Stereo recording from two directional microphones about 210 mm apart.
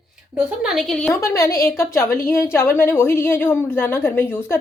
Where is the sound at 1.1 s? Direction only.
15° left (ahead or behind).